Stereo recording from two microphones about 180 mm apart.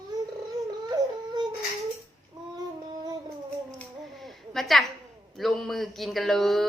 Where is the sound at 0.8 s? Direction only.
25° right (ahead or behind).